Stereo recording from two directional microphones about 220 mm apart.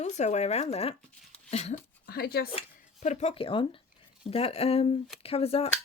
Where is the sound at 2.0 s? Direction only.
45° left (ahead or behind).